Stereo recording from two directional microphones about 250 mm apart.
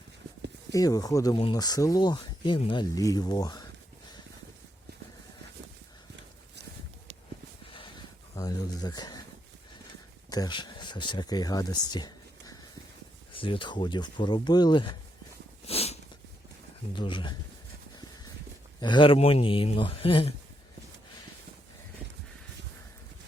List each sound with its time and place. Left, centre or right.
0.7 s speech: centre
8.4 s a sound: centre
10.2 s speech: centre
15.6 s a sound: left
16.9 s speech: centre
18.8 s speech: centre